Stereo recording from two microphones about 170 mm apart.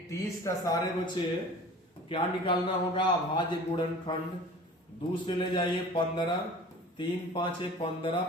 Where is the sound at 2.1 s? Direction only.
30° left (ahead or behind).